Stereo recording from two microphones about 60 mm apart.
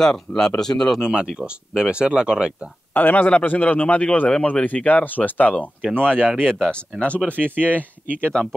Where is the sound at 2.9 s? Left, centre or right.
Left.